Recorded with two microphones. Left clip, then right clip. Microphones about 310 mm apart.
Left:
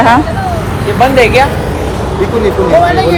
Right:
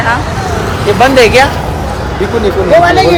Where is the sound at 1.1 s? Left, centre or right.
Right.